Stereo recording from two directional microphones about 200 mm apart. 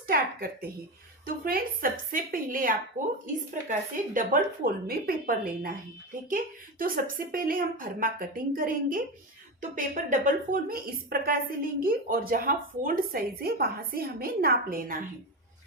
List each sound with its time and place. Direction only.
0.1 s a woman's voice: 50° right (ahead or behind)